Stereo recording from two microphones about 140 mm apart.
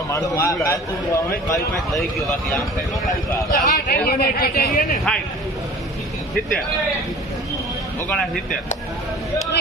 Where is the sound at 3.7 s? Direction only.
90° left.